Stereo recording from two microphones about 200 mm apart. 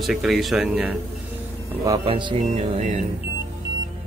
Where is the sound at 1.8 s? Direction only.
25° right (ahead or behind).